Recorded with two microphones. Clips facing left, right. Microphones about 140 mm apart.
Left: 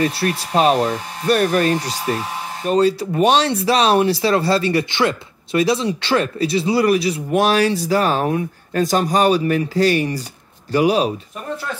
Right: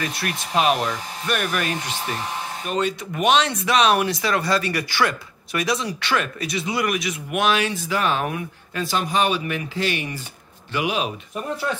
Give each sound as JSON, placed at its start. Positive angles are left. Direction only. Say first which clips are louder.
{"t": 0.0, "sound": "speech", "louder": "left 8 dB", "side_deg": 30}